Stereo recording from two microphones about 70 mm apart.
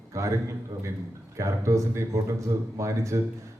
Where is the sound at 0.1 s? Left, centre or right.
Right.